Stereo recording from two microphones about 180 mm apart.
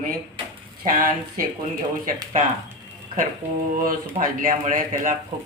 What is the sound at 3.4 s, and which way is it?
Speech, 10° right (ahead or behind).